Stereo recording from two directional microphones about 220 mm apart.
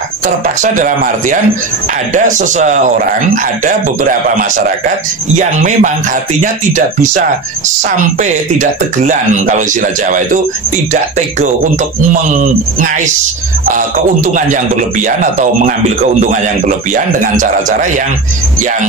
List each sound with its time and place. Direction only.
0.6 s a man's voice: 35° right (ahead or behind)